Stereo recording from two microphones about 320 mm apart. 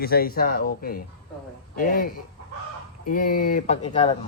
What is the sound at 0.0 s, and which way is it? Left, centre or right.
Speech, left.